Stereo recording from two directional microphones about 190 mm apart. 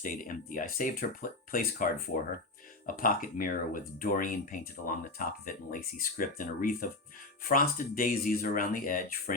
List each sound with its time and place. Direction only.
0.0 s speech: 45° left (ahead or behind)